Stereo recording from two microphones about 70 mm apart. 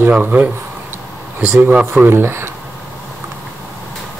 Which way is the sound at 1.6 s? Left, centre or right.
Right.